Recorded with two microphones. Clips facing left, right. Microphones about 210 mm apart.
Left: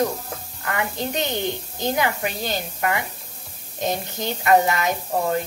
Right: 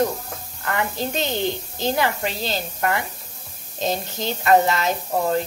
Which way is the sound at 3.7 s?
15° left (ahead or behind).